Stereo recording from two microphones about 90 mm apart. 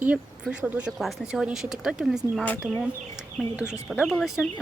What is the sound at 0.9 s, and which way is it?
Speech, 5° right (ahead or behind).